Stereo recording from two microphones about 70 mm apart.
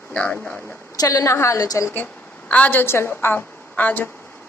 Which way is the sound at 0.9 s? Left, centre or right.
Left.